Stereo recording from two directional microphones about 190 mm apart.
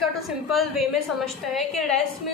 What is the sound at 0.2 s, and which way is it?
Speech, centre (ahead or behind).